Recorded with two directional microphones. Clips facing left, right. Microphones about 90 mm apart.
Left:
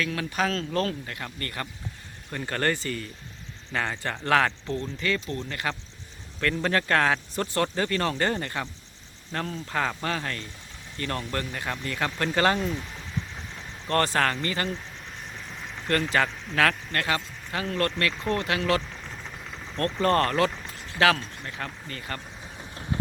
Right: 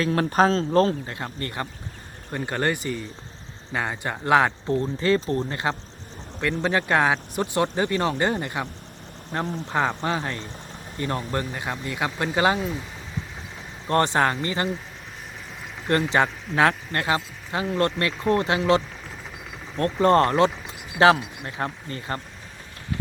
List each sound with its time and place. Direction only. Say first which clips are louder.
0.0 s speech: right 7 dB; 40° right (ahead or behind)
6.4 s speech: right 2 dB; 15° right (ahead or behind)
13.8 s speech: right 3 dB; 20° right (ahead or behind)
15.9 s speech: right 3 dB; 20° right (ahead or behind)
21.4 s speech: right 6 dB; 30° right (ahead or behind)